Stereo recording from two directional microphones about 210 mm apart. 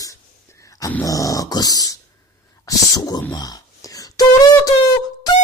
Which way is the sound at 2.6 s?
15° left (ahead or behind).